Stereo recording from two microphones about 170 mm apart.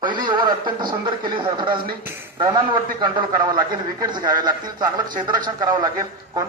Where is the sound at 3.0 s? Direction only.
25° right (ahead or behind).